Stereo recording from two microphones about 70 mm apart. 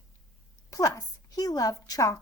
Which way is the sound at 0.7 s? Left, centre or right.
Left.